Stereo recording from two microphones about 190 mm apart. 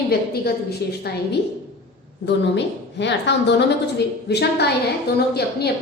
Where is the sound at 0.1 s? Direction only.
55° left (ahead or behind).